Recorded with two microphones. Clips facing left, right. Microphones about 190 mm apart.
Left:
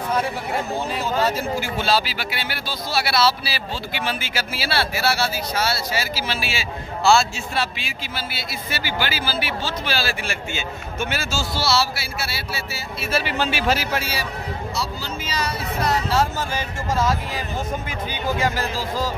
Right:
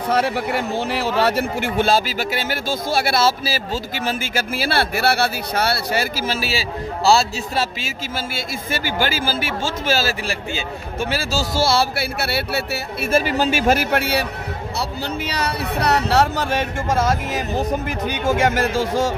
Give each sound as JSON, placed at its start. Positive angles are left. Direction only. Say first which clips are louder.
{"t": 0.1, "sound": "speech", "louder": "right 5 dB", "side_deg": -75}
{"t": 8.4, "sound": "speech", "louder": "right 4 dB", "side_deg": -50}
{"t": 18.8, "sound": "music", "louder": "right 6 dB", "side_deg": -75}